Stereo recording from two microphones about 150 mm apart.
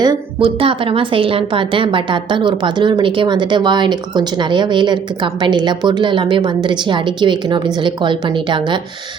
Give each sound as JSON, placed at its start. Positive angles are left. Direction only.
{"t": 0.0, "sound": "a woman's voice", "side_deg": -30}